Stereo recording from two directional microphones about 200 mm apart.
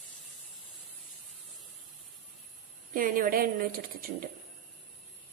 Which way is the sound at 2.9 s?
45° right (ahead or behind).